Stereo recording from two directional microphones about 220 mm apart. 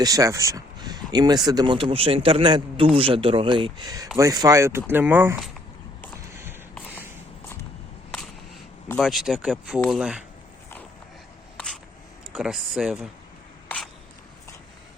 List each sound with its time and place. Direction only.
0.0 s speech: 15° right (ahead or behind)
6.3 s a sound: 10° right (ahead or behind)
9.0 s speech: centre (ahead or behind)
12.3 s speech: centre (ahead or behind)